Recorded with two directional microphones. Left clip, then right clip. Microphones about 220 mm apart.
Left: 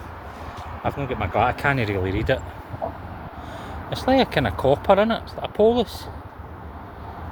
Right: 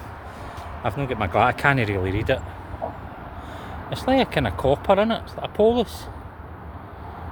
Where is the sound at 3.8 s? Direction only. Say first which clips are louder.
Left 1 dB; 5° right (ahead or behind).